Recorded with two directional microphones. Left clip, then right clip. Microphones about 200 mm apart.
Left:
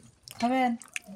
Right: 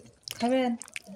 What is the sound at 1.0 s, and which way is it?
Drip, 20° right (ahead or behind).